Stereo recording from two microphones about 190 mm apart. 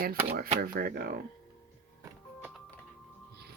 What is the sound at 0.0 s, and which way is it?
Speech, 50° right (ahead or behind).